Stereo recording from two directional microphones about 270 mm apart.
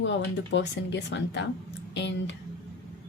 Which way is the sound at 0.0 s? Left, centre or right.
Left.